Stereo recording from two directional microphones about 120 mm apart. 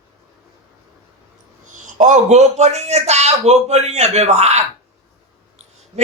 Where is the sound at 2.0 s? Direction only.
85° right; by 4.6 s 65° right (ahead or behind).